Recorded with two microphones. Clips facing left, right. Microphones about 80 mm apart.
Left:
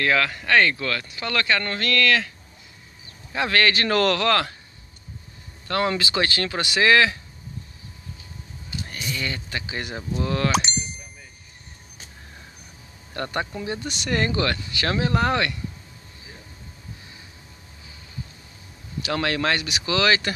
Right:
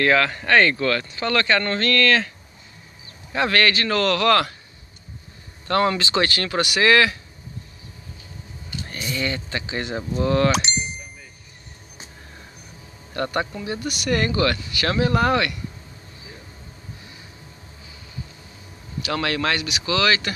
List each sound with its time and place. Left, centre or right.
0.0 s speech: centre
3.3 s speech: centre
3.7 s speech: left
4.3 s speech: centre
5.7 s speech: centre
8.8 s speech: centre
13.1 s speech: centre
13.8 s speech: left
19.0 s speech: left